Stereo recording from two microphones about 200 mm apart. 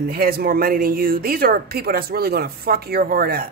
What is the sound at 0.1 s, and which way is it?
A woman's voice, 50° right (ahead or behind).